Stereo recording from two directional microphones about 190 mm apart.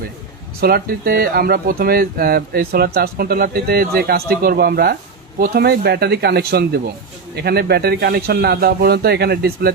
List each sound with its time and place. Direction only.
0.6 s a man's voice: 50° right (ahead or behind)